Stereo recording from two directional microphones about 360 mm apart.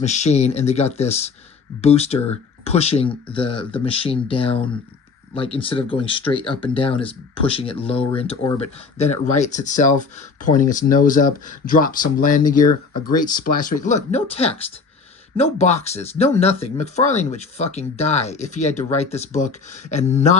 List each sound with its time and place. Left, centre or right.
0.0 s speech: centre